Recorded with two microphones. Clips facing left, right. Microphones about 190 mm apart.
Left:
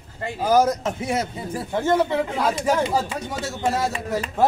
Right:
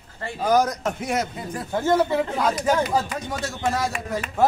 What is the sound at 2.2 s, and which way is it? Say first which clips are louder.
Speech: even; 10° left (ahead or behind).